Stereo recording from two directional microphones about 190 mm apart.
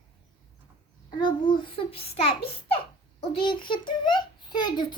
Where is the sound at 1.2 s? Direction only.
25° left (ahead or behind).